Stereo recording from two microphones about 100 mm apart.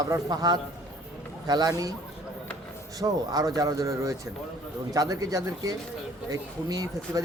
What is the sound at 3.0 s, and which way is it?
Speech, 40° right (ahead or behind).